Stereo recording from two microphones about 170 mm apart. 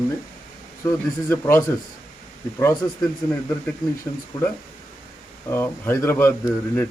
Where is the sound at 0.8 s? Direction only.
15° left (ahead or behind).